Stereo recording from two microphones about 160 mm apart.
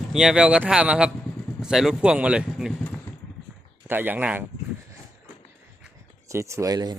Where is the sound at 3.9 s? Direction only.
10° right (ahead or behind).